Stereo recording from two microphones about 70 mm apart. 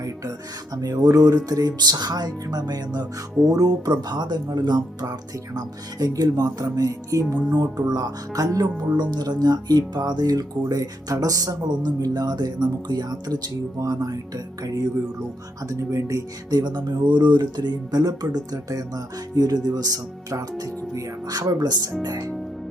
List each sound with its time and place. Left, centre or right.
0.0 s speech: right
3.5 s speech: right
7.8 s speech: right
9.0 s speech: right
10.7 s speech: right
15.7 s speech: right
16.5 s speech: right